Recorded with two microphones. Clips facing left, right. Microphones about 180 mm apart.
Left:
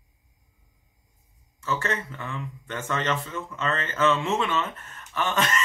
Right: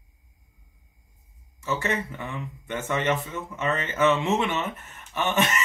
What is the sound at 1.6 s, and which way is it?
Speech, 15° right (ahead or behind).